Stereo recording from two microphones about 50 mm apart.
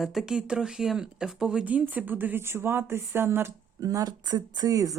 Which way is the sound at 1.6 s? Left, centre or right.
Right.